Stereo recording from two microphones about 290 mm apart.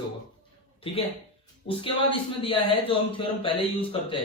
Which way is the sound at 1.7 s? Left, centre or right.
Centre.